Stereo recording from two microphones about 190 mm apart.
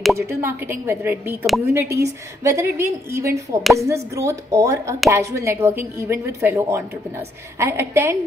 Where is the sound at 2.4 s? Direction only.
15° right (ahead or behind).